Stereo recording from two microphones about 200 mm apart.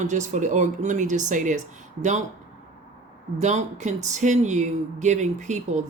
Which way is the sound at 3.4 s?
35° right (ahead or behind).